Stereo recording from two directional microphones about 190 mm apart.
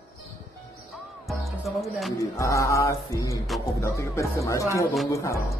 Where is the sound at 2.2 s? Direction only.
15° left (ahead or behind).